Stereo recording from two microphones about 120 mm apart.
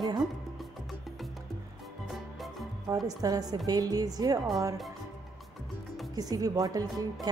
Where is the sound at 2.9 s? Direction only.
30° right (ahead or behind).